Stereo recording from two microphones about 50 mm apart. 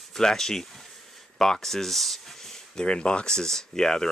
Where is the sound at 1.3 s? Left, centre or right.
Centre.